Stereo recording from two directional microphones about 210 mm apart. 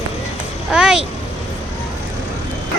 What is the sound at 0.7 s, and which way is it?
Speech, 5° right (ahead or behind).